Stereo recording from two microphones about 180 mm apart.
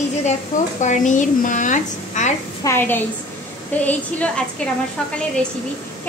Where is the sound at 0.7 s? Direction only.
45° left (ahead or behind).